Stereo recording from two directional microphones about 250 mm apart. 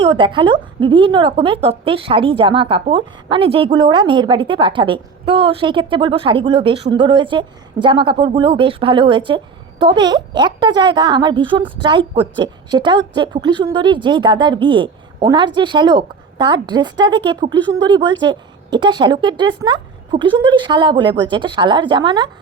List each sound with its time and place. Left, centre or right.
0.0 s a woman's voice: centre